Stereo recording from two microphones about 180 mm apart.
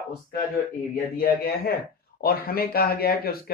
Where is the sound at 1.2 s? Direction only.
60° left (ahead or behind).